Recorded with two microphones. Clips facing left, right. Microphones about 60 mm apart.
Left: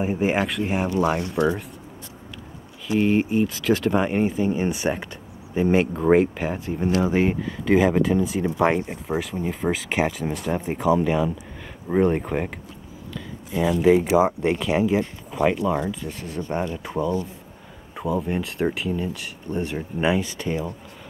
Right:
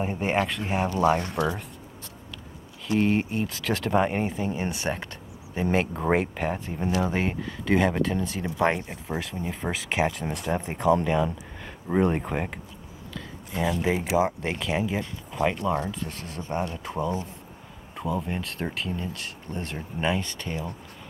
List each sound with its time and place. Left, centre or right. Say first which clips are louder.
0.0 s speech: left 3 dB; centre
2.9 s speech: left 4 dB; centre
16.1 s speech: left 6 dB; centre
17.0 s speech: left 4 dB; right
17.9 s a sound: left 4 dB; centre
18.2 s speech: left 7 dB; centre